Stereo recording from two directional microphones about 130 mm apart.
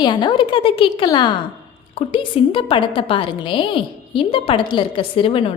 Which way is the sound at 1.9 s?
45° left (ahead or behind).